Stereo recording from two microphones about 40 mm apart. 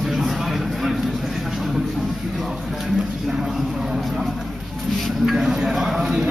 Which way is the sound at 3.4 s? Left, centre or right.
Centre.